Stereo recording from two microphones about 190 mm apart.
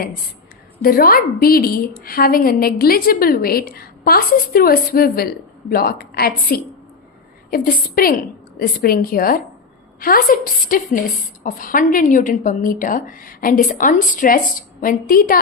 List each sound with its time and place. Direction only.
0.8 s a woman's voice: 50° left (ahead or behind)